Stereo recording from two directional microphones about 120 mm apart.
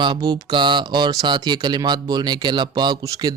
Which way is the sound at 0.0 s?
40° right (ahead or behind).